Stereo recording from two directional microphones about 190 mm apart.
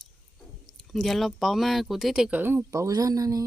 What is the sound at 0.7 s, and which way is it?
Speech, centre (ahead or behind).